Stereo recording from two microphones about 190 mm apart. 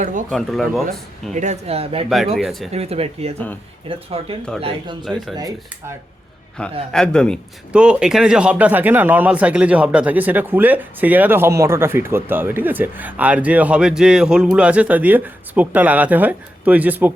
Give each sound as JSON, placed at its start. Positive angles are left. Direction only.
{"t": 0.0, "sound": "speech", "side_deg": -45}
{"t": 0.3, "sound": "speech", "side_deg": 0}
{"t": 1.3, "sound": "speech", "side_deg": -40}
{"t": 2.0, "sound": "speech", "side_deg": 0}
{"t": 2.7, "sound": "speech", "side_deg": -35}
{"t": 6.6, "sound": "a man's voice", "side_deg": 5}